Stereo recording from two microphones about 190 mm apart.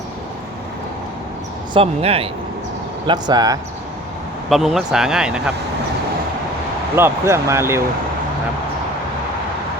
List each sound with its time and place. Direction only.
1.7 s speech: 30° right (ahead or behind)
3.1 s speech: 20° right (ahead or behind)
4.4 s speech: centre (ahead or behind)
6.9 s speech: 15° right (ahead or behind)